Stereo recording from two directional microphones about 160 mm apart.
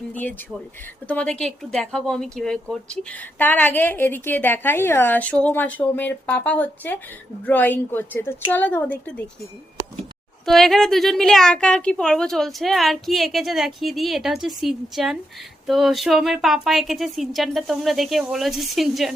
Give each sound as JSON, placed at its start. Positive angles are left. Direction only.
{"t": 0.1, "sound": "speech", "side_deg": 10}
{"t": 10.4, "sound": "a woman's voice", "side_deg": 0}